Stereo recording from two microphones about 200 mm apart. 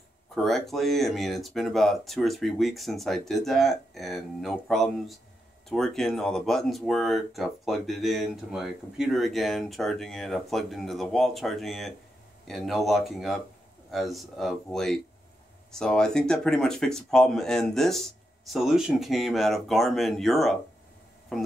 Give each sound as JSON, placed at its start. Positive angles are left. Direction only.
{"t": 0.3, "sound": "speech", "side_deg": 0}